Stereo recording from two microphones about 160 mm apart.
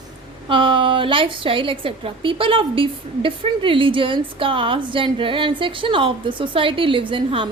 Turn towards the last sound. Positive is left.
turn(degrees=-30)  # may be behind; listen again after turning